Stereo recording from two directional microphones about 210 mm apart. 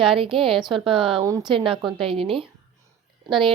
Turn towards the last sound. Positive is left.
turn(degrees=-25)  # may be behind; listen again after turning